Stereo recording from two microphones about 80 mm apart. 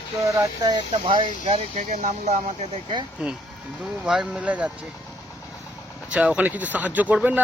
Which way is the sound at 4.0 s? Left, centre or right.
Centre.